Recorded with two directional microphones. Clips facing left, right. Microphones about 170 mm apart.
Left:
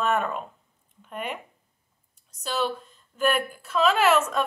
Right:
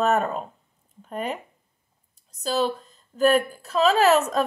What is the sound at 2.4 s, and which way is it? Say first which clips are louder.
A woman's voice: right 4 dB; 35° right (ahead or behind).